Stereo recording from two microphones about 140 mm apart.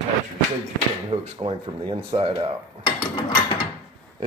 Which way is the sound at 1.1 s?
35° right (ahead or behind).